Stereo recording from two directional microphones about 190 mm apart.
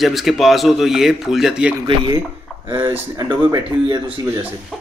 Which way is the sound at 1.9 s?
20° right (ahead or behind).